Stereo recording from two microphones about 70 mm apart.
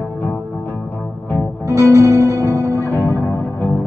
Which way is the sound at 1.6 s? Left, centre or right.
Right.